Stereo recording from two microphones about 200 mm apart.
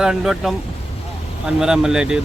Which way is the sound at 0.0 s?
Centre (ahead or behind).